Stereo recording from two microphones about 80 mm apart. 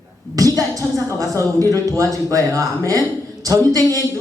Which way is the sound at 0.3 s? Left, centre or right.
Right.